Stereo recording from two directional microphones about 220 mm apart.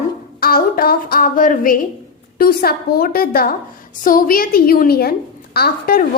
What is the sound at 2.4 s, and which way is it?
A woman's voice, 45° left (ahead or behind).